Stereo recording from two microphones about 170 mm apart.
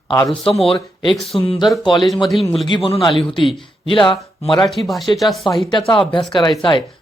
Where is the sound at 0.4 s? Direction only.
35° left (ahead or behind).